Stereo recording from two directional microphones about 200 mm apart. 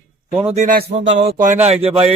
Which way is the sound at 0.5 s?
40° right (ahead or behind).